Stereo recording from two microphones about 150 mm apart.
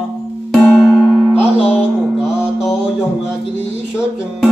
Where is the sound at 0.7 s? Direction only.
5° left (ahead or behind).